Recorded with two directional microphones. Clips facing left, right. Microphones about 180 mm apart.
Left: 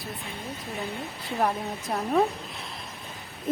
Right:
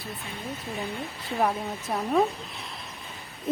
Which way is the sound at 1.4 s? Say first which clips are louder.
Even; centre (ahead or behind).